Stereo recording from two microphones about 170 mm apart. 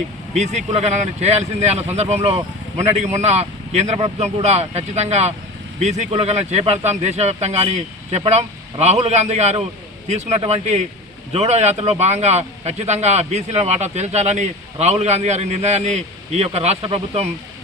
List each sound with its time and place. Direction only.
0.3 s speech: 40° right (ahead or behind)